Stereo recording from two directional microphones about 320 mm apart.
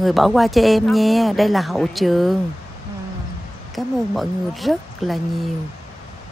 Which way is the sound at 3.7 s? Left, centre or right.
Centre.